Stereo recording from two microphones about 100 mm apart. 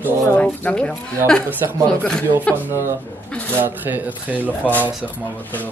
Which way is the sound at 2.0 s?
5° left (ahead or behind).